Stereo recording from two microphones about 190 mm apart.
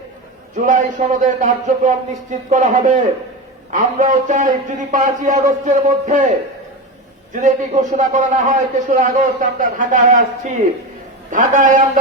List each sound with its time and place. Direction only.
0.5 s a man's voice: 40° right (ahead or behind)
7.4 s a man's voice: 40° right (ahead or behind)
11.3 s a man's voice: 40° right (ahead or behind)